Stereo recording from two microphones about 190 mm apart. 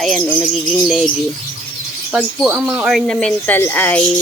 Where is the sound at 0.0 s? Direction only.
Centre (ahead or behind).